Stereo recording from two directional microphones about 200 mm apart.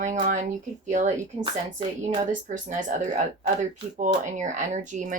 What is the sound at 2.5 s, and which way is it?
Speech, 40° right (ahead or behind).